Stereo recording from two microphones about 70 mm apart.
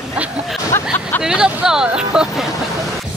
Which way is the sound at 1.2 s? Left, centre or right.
Centre.